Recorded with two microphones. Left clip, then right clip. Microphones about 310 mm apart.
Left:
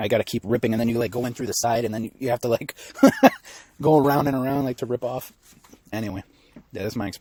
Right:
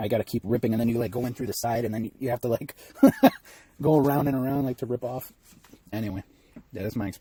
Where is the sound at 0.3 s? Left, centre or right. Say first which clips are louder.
Left 3 dB; left.